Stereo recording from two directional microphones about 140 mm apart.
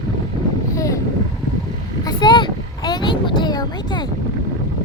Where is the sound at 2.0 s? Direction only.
35° left (ahead or behind).